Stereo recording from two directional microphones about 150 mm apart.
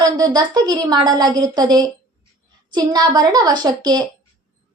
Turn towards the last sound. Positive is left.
turn(degrees=-30)  # may be behind; listen again after turning